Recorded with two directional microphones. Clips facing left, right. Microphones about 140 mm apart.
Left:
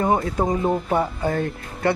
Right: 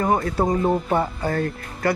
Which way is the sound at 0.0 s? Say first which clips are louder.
Even; 25° left (ahead or behind).